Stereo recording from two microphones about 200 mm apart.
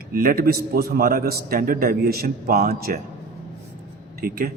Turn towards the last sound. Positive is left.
turn(degrees=-45)  # may be behind; listen again after turning